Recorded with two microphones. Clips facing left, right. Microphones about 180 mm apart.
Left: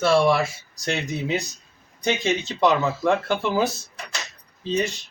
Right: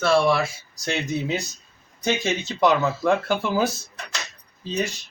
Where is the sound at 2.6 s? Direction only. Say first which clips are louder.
Right 2 dB; centre (ahead or behind).